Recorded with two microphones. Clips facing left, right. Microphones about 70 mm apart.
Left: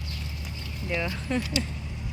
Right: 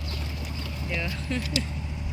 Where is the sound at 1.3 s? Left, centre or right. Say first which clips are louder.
Left 3 dB; centre.